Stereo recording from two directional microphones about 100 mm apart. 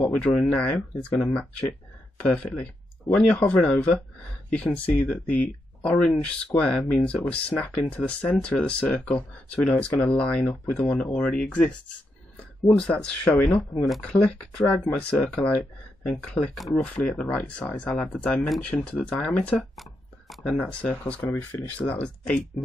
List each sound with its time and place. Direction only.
0.2 s speech: 5° left (ahead or behind)
12.7 s speech: 10° left (ahead or behind)
14.6 s speech: 10° left (ahead or behind)
16.8 s speech: 15° left (ahead or behind)
19.8 s a sound: centre (ahead or behind)
20.7 s speech: 15° left (ahead or behind)